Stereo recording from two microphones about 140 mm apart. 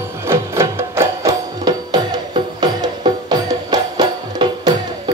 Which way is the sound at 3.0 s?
30° right (ahead or behind).